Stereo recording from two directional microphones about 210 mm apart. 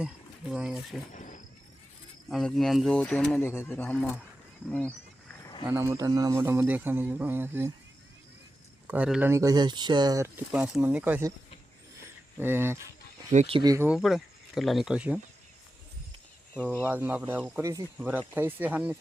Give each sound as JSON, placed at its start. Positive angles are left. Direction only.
{"t": 0.5, "sound": "speech", "side_deg": -5}
{"t": 1.1, "sound": "wild animals", "side_deg": 40}
{"t": 2.3, "sound": "speech", "side_deg": 0}
{"t": 5.4, "sound": "a sound", "side_deg": 20}
{"t": 5.6, "sound": "speech", "side_deg": -10}
{"t": 8.9, "sound": "speech", "side_deg": -5}
{"t": 12.0, "sound": "a sound", "side_deg": -10}
{"t": 13.3, "sound": "speech", "side_deg": -35}
{"t": 13.6, "sound": "speech", "side_deg": -15}
{"t": 16.8, "sound": "speech", "side_deg": -10}